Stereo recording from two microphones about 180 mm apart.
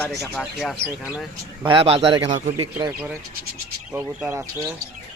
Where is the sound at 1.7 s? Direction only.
30° right (ahead or behind).